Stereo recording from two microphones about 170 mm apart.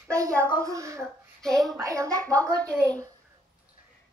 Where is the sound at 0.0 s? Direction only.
15° right (ahead or behind).